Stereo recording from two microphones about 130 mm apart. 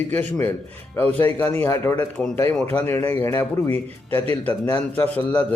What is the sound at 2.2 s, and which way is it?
Speech, 5° left (ahead or behind).